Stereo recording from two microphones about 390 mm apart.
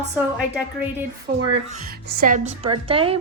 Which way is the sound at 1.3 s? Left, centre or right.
Right.